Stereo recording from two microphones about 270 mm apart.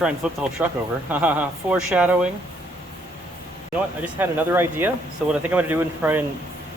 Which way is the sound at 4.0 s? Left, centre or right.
Centre.